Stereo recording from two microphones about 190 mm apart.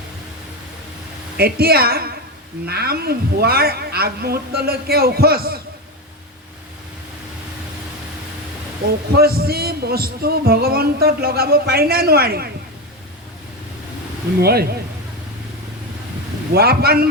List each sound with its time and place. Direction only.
1.4 s a woman's voice: 55° right (ahead or behind)
9.1 s speech: 55° right (ahead or behind)
14.4 s a woman's voice: 55° right (ahead or behind)
16.5 s a woman's voice: 55° right (ahead or behind)